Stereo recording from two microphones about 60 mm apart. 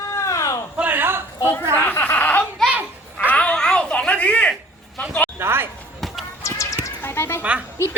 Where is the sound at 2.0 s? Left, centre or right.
Left.